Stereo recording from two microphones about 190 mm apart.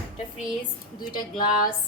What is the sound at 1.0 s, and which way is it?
Speech, 20° left (ahead or behind).